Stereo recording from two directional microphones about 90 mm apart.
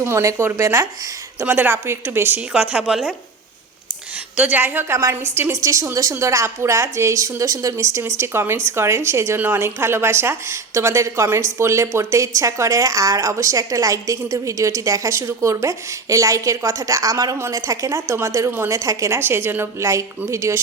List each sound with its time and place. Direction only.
0.0 s a woman's voice: 30° right (ahead or behind)
1.4 s speech: 20° right (ahead or behind)
2.5 s a woman's voice: 5° right (ahead or behind)
4.4 s a woman's voice: 20° right (ahead or behind)